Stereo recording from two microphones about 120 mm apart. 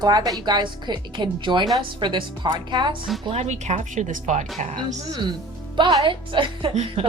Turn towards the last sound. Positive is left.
turn(degrees=-55)  # may be behind; listen again after turning